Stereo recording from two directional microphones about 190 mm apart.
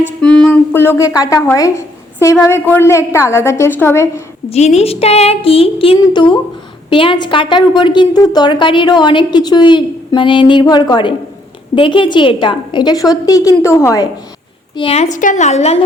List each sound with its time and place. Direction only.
0.0 s speech: 5° left (ahead or behind)
4.4 s a woman's voice: 35° left (ahead or behind); by 14.1 s 15° left (ahead or behind)
14.8 s speech: 30° left (ahead or behind)